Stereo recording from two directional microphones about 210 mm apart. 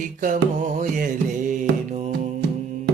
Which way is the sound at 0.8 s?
40° right (ahead or behind).